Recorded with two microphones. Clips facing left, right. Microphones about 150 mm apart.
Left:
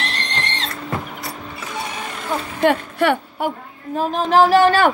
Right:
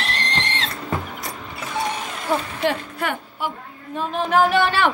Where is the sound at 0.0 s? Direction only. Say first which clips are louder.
Even; centre (ahead or behind).